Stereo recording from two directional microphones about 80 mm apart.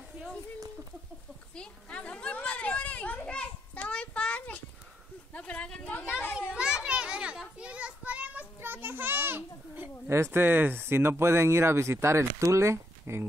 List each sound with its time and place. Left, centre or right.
1.5 s children playing: centre
5.3 s speech: centre
6.3 s children playing: centre; by 13.2 s right